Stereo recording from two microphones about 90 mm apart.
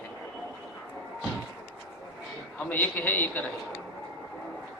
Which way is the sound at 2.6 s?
20° left (ahead or behind).